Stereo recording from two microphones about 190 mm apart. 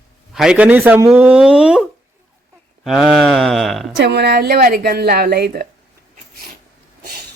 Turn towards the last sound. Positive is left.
turn(degrees=-55)  # may be behind; listen again after turning